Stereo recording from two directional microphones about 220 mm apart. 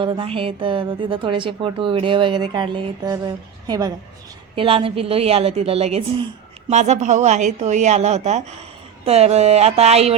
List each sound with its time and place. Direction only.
0.0 s a woman's voice: 25° right (ahead or behind)